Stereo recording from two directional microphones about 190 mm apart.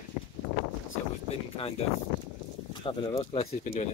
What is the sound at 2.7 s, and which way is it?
Speech, 30° left (ahead or behind).